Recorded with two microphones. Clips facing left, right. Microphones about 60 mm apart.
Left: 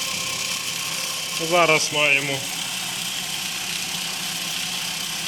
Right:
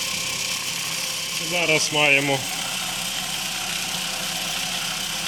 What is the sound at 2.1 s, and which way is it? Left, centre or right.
Speech, centre.